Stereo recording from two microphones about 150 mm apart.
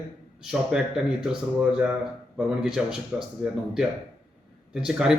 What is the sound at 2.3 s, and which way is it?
Speech, 5° right (ahead or behind).